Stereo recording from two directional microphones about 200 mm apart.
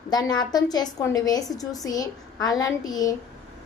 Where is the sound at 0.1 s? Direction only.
20° left (ahead or behind).